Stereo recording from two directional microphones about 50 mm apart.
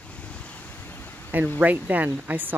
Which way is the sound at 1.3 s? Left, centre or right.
Right.